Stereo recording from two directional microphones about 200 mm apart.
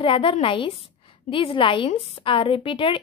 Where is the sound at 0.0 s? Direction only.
25° left (ahead or behind).